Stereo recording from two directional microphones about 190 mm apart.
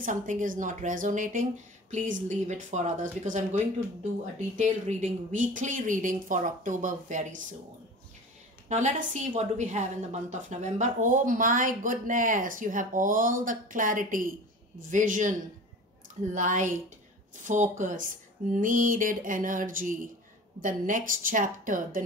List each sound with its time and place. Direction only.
0.0 s speech: 45° right (ahead or behind)
8.6 s speech: 40° right (ahead or behind)
16.3 s speech: 40° right (ahead or behind)